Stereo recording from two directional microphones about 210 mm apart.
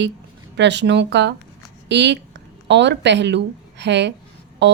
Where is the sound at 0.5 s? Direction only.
55° right (ahead or behind).